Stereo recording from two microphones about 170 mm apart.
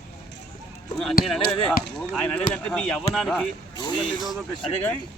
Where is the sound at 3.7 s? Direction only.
25° left (ahead or behind).